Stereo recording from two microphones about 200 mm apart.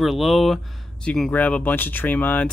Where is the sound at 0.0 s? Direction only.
Centre (ahead or behind).